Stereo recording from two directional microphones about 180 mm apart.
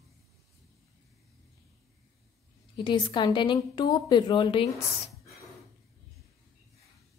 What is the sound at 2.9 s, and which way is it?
A woman's voice, 25° left (ahead or behind).